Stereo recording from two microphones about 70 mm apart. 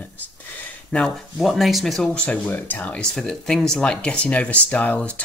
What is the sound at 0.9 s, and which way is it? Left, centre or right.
Speech, centre.